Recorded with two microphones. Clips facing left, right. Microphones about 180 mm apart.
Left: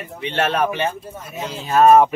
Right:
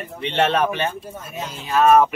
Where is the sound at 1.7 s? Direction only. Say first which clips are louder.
Left 3 dB; 45° left (ahead or behind).